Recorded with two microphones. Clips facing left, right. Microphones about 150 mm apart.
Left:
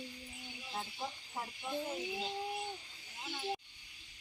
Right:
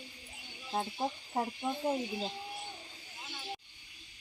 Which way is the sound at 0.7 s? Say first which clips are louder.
Right 8 dB; 50° right (ahead or behind).